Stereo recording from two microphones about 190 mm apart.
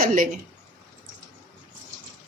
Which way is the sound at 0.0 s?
45° right (ahead or behind).